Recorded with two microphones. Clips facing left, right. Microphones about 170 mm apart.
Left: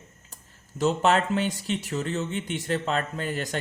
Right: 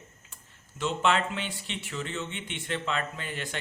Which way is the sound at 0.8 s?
40° left (ahead or behind).